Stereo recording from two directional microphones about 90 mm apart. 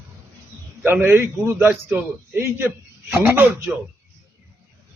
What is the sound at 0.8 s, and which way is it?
A man's voice, 25° right (ahead or behind).